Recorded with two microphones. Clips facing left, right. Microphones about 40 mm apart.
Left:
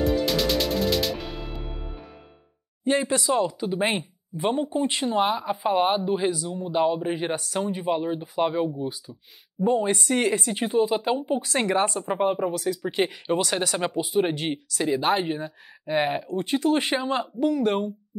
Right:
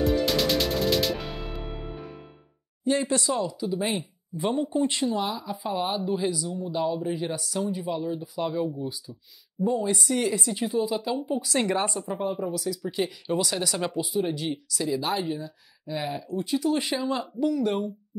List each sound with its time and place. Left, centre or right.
0.0 s music: centre
2.8 s speech: left
14.1 s speech: left